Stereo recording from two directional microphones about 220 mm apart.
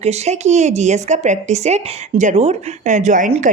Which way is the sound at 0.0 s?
30° right (ahead or behind).